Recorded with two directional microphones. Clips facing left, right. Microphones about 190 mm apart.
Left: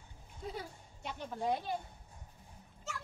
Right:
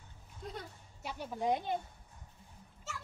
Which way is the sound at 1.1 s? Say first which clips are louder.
Right 2 dB; 10° right (ahead or behind).